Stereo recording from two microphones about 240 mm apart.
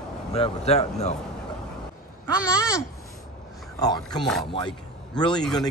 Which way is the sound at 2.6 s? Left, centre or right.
Centre.